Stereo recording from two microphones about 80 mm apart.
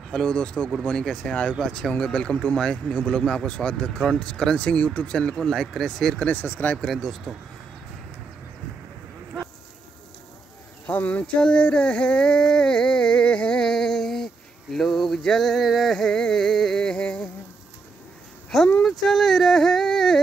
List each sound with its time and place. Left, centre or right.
0.1 s speech: centre
6.2 s speech: left
6.9 s speech: centre
10.9 s a sound: left
18.5 s speech: centre